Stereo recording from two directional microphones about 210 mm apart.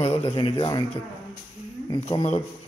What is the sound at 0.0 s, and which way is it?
Speech, 30° left (ahead or behind).